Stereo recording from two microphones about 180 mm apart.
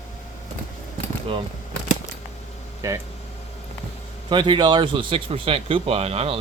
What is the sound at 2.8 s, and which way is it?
Speech, 15° right (ahead or behind).